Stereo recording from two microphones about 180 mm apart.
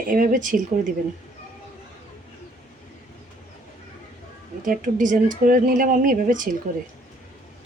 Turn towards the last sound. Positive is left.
turn(degrees=-50)  # may be behind; listen again after turning